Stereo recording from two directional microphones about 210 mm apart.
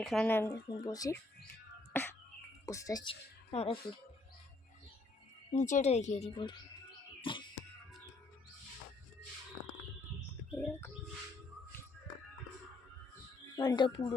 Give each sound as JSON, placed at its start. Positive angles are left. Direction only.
{"t": 0.0, "sound": "speech", "side_deg": 0}
{"t": 0.9, "sound": "speech", "side_deg": 15}
{"t": 5.5, "sound": "speech", "side_deg": 35}
{"t": 7.2, "sound": "music", "side_deg": 25}
{"t": 10.5, "sound": "speech", "side_deg": 10}
{"t": 13.6, "sound": "speech", "side_deg": 20}